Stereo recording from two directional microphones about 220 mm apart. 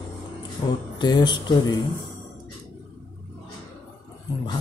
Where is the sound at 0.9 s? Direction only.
20° left (ahead or behind).